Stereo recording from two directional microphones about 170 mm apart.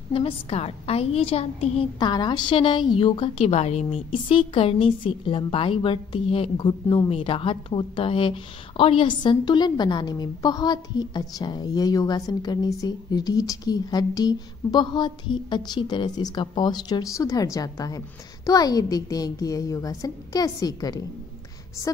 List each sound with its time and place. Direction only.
0.1 s a woman's voice: 35° left (ahead or behind)
2.0 s a woman's voice: 25° left (ahead or behind)